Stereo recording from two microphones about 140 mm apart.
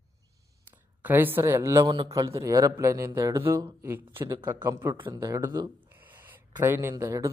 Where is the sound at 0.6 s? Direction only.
15° right (ahead or behind).